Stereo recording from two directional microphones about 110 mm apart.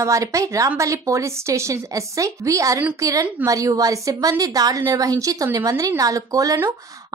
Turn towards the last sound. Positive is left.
turn(degrees=-25)  # may be behind; listen again after turning